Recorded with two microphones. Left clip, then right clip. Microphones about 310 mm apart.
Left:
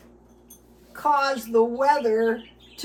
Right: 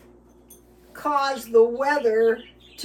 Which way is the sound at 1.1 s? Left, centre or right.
Centre.